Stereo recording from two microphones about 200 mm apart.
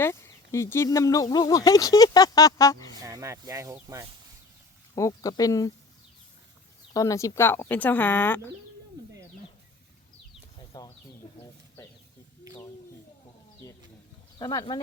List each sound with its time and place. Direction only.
0.0 s speech: 15° left (ahead or behind)
2.9 s speech: 15° right (ahead or behind)
4.9 s speech: 15° left (ahead or behind)
6.9 s speech: 15° left (ahead or behind)
10.7 s speech: 20° left (ahead or behind)
11.8 s a sound: 15° left (ahead or behind)
14.3 s speech: 20° left (ahead or behind)